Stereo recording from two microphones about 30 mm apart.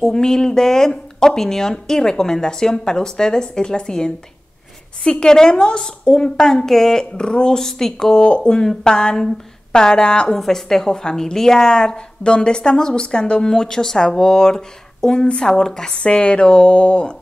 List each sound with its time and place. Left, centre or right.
0.0 s speech: left
7.2 s speech: left
7.5 s speech: centre
8.2 s speech: left
10.3 s speech: centre
16.0 s speech: left